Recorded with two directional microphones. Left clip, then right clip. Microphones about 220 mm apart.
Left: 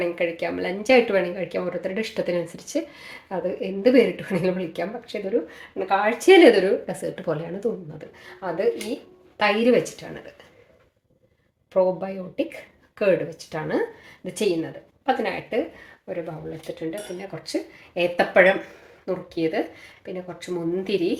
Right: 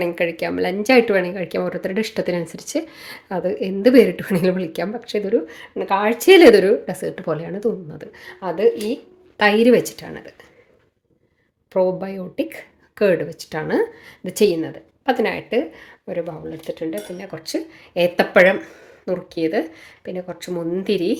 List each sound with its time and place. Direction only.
0.0 s speech: 45° right (ahead or behind); by 7.7 s 25° right (ahead or behind)
7.9 s speech: 45° right (ahead or behind)
11.7 s speech: 40° right (ahead or behind)